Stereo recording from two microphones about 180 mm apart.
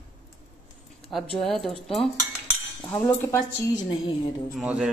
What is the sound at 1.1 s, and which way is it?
A man's voice, centre (ahead or behind).